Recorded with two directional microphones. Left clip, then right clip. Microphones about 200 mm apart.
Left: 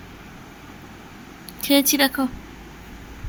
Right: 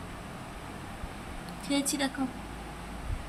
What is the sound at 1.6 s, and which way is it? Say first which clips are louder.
Speech: left 13 dB; 30° left (ahead or behind).